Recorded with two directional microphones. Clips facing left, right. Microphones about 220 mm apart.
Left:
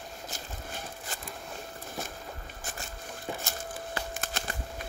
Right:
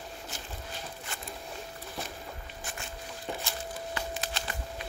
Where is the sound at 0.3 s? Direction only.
40° left (ahead or behind).